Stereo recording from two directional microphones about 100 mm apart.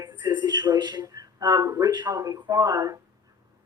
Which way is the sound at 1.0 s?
35° right (ahead or behind).